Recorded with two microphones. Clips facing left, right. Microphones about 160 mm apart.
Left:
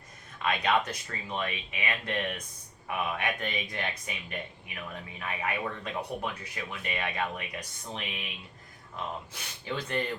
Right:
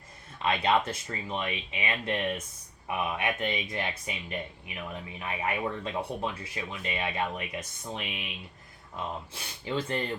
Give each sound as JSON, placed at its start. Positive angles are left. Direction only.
{"t": 0.4, "sound": "speech", "side_deg": -25}
{"t": 9.3, "sound": "speech", "side_deg": -25}